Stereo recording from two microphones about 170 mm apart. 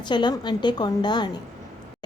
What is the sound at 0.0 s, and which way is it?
A woman's voice, 25° left (ahead or behind).